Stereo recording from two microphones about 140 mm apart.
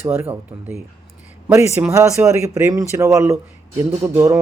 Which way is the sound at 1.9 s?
20° right (ahead or behind).